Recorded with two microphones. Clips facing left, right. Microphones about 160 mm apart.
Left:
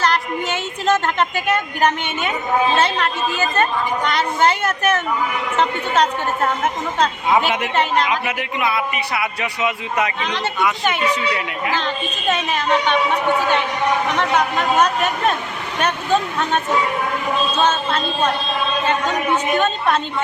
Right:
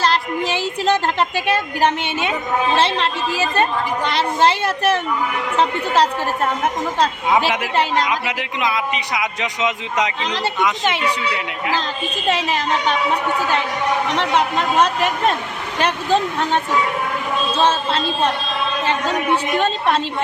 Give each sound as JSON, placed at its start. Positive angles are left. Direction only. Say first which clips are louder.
{"t": 0.0, "sound": "a sound", "louder": "right 1 dB", "side_deg": -30}
{"t": 2.7, "sound": "a woman's voice", "louder": "even", "side_deg": -30}
{"t": 7.3, "sound": "speech", "louder": "even", "side_deg": -10}
{"t": 12.3, "sound": "a woman's voice", "louder": "left 1 dB", "side_deg": -35}
{"t": 14.2, "sound": "speech", "louder": "even", "side_deg": -30}
{"t": 17.6, "sound": "a woman's voice", "louder": "right 3 dB", "side_deg": -30}
{"t": 19.5, "sound": "speech", "louder": "even", "side_deg": -30}